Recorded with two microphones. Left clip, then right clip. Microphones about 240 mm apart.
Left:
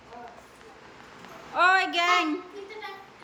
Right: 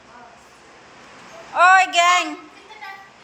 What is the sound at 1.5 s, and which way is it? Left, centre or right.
Speech, centre.